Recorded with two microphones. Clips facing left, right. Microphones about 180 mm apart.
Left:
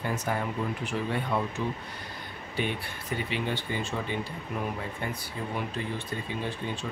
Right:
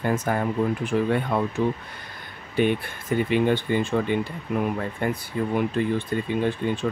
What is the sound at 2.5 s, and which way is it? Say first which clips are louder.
Speech: right 10 dB; 50° right (ahead or behind).